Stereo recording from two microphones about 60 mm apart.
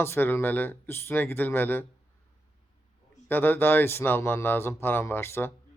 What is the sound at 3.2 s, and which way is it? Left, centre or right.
A man's voice, left.